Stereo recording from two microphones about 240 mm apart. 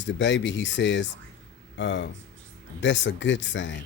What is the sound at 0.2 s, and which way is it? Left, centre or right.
Speech, left.